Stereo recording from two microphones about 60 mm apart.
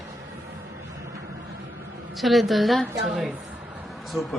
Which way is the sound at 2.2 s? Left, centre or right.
Centre.